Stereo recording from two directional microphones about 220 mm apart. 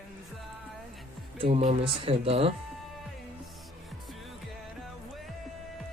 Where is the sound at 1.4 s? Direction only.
25° right (ahead or behind).